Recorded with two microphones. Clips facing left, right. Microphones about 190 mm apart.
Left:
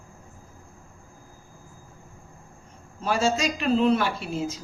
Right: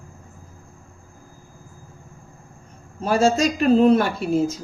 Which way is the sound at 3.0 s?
45° right (ahead or behind).